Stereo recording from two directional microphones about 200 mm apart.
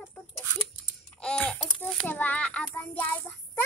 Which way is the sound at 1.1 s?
5° left (ahead or behind).